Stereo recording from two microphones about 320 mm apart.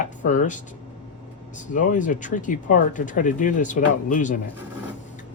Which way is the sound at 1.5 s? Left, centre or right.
Left.